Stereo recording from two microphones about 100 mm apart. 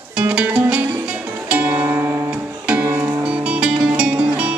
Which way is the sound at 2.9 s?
20° right (ahead or behind).